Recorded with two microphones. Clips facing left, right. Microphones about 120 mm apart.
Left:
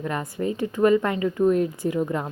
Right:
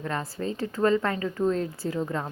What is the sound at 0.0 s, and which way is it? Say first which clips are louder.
Speech: left 4 dB; 15° left (ahead or behind).